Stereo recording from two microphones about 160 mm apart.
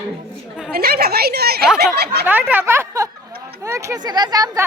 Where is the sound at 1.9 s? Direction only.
90° right.